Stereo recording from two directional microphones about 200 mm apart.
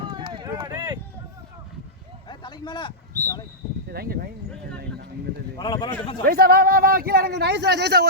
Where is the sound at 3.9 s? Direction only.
50° right (ahead or behind).